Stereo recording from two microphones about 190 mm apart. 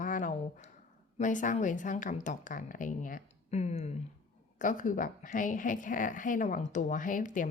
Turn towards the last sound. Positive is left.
turn(degrees=45)  # may be behind; listen again after turning